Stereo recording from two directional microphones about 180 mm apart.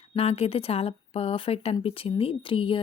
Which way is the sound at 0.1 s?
35° left (ahead or behind).